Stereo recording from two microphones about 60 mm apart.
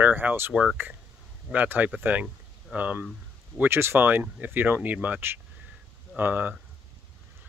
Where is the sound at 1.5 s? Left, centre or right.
Right.